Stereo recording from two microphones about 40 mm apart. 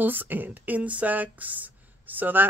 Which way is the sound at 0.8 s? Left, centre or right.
Right.